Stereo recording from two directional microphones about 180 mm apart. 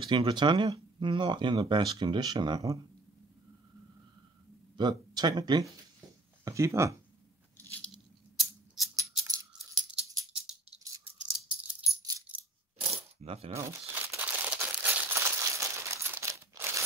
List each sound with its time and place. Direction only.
0.0 s speech: 25° right (ahead or behind)
4.7 s speech: 25° right (ahead or behind)
7.7 s a sound: centre (ahead or behind)
11.3 s rattle: 5° right (ahead or behind)
12.0 s rattle: 20° right (ahead or behind)
12.7 s coin: 35° right (ahead or behind)
13.6 s crumpling: 15° right (ahead or behind)